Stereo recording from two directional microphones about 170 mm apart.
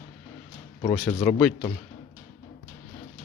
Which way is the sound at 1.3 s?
10° left (ahead or behind).